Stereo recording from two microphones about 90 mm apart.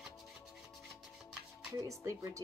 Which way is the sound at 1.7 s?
35° right (ahead or behind).